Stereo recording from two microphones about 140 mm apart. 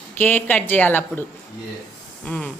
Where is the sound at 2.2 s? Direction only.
10° left (ahead or behind).